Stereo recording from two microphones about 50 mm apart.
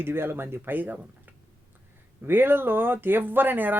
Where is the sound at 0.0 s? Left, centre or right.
Right.